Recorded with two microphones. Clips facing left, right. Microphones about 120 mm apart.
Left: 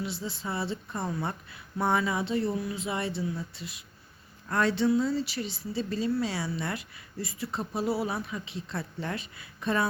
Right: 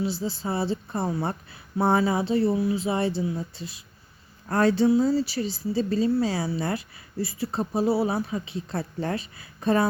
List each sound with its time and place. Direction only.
0.0 s a woman's voice: 35° right (ahead or behind)